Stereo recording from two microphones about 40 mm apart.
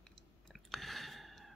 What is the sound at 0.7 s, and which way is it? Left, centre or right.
Chewing, centre.